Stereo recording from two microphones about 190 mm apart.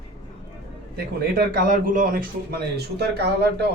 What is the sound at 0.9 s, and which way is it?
Speech, 50° right (ahead or behind).